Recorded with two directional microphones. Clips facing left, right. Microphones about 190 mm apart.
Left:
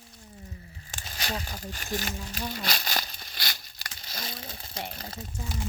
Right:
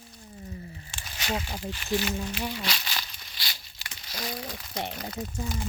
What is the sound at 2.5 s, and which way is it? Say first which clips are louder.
Crumpling: left 2 dB; 45° left (ahead or behind).